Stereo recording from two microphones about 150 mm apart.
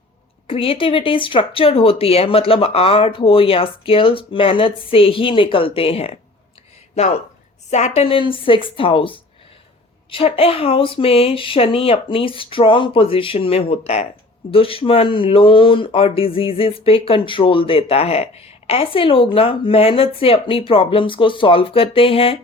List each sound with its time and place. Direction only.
0.4 s speech: 40° left (ahead or behind)
7.7 s speech: 50° left (ahead or behind)